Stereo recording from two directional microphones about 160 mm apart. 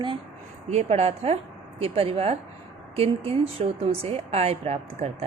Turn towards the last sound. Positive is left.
turn(degrees=-40)  # may be behind; listen again after turning